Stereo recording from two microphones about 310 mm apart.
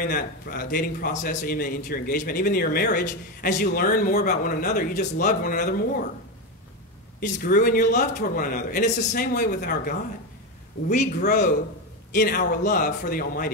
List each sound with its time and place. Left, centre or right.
0.0 s a man's voice: left
7.2 s a man's voice: left